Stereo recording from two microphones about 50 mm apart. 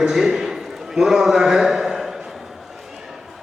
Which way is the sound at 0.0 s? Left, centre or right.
Centre.